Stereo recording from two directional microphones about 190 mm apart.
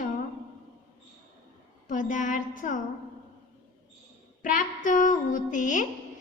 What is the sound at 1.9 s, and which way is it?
Child singing, 40° left (ahead or behind).